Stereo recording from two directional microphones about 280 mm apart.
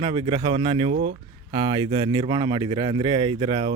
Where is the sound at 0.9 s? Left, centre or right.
Right.